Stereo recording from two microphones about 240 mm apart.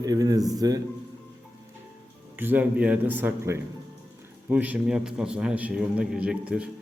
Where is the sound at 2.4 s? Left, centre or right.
Centre.